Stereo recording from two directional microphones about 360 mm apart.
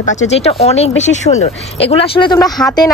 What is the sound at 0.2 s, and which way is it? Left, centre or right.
Speech, centre.